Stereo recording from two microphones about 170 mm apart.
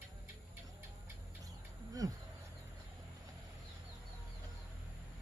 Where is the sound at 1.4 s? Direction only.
20° right (ahead or behind).